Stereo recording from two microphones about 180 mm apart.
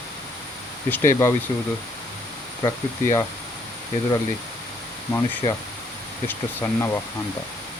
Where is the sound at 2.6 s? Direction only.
20° left (ahead or behind).